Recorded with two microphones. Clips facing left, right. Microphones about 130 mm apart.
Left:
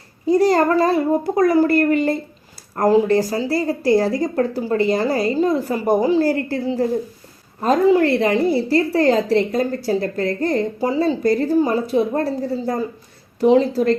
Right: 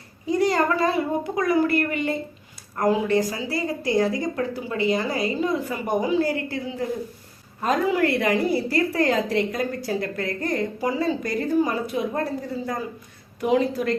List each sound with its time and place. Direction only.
0.3 s a woman's voice: 35° left (ahead or behind)